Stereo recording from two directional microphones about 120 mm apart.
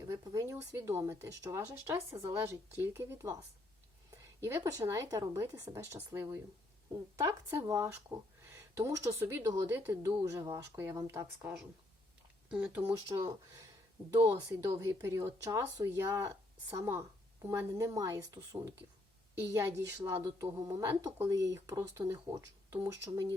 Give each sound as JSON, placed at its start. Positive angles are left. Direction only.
{"t": 0.0, "sound": "a sound", "side_deg": -30}
{"t": 0.7, "sound": "speech", "side_deg": -25}
{"t": 7.2, "sound": "speech", "side_deg": -25}
{"t": 13.1, "sound": "speech", "side_deg": -30}
{"t": 14.8, "sound": "speech", "side_deg": -25}